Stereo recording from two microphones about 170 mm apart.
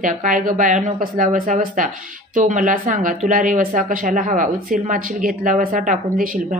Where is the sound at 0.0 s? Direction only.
50° right (ahead or behind).